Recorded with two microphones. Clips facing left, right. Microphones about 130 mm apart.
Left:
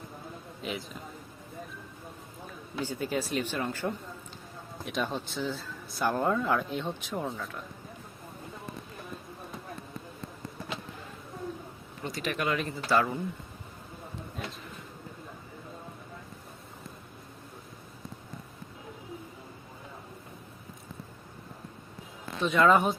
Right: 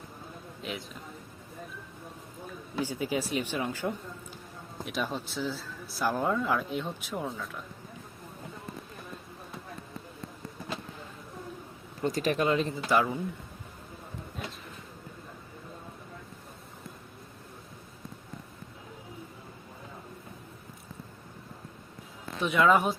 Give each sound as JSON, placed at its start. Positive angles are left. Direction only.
{"t": 0.6, "sound": "speech", "side_deg": 0}
{"t": 2.8, "sound": "speech", "side_deg": -10}
{"t": 12.0, "sound": "speech", "side_deg": -40}
{"t": 14.4, "sound": "speech", "side_deg": 0}
{"t": 22.4, "sound": "speech", "side_deg": -10}